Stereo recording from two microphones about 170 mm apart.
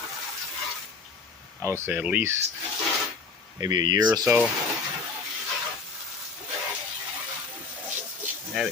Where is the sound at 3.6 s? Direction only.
25° right (ahead or behind).